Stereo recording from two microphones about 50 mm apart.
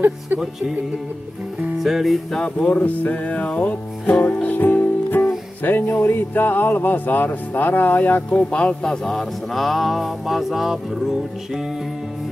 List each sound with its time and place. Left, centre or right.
0.4 s music: centre
1.8 s music: centre
2.6 s music: left
5.6 s speech: left
8.8 s music: centre